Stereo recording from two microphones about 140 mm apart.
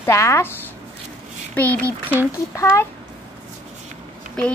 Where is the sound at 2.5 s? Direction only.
20° left (ahead or behind).